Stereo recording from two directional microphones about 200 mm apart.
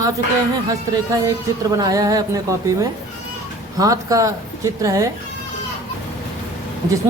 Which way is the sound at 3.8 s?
15° right (ahead or behind).